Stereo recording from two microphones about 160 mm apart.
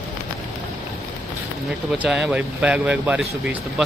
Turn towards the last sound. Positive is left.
turn(degrees=-5)  # may be behind; listen again after turning